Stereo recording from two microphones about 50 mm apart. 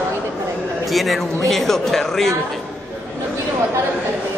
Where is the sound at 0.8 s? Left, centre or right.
Centre.